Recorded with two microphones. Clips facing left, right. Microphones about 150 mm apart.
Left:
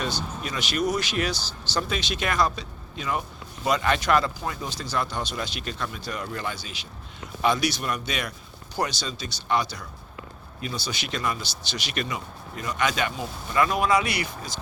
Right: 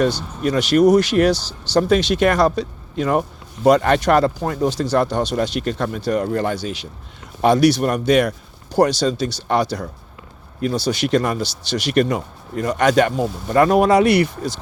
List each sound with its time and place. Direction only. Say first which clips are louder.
0.0 s speech: right 11 dB; 75° right (ahead or behind)
6.1 s speech: right 12 dB; 40° right (ahead or behind)
6.5 s speech: right 12 dB; 75° right (ahead or behind)
13.1 s speech: right 11 dB; 40° right (ahead or behind)
13.7 s speech: right 10 dB; 65° right (ahead or behind)